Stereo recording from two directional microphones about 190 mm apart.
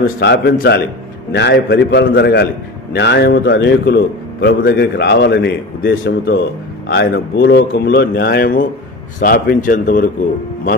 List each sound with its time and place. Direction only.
0.2 s a man's voice: 65° left (ahead or behind)